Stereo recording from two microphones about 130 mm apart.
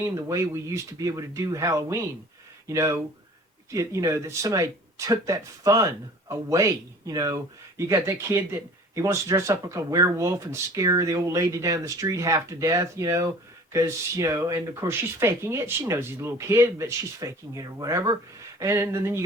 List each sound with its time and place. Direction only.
0.0 s speech: 25° right (ahead or behind)